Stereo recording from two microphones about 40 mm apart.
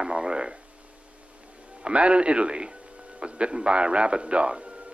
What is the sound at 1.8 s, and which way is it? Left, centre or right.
A man's voice, right.